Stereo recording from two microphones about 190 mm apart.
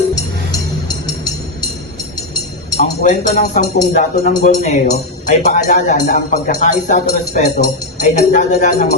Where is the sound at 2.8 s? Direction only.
40° left (ahead or behind).